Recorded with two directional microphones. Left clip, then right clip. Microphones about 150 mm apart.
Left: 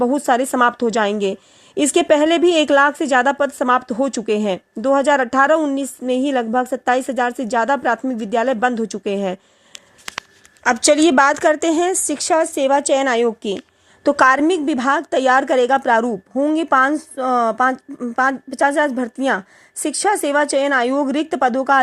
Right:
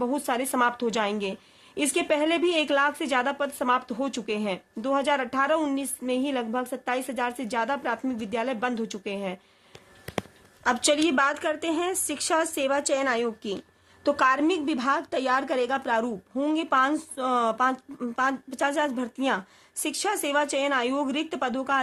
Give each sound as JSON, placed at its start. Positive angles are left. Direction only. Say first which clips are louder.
{"t": 0.0, "sound": "a woman's voice", "louder": "left 11 dB", "side_deg": 40}
{"t": 10.6, "sound": "a woman's voice", "louder": "left 9 dB", "side_deg": 40}
{"t": 16.3, "sound": "speech", "louder": "left 9 dB", "side_deg": 25}
{"t": 16.6, "sound": "a woman's voice", "louder": "left 7 dB", "side_deg": 45}